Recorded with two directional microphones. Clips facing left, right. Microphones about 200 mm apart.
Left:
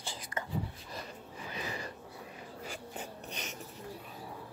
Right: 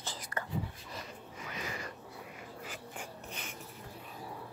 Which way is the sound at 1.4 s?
30° left (ahead or behind).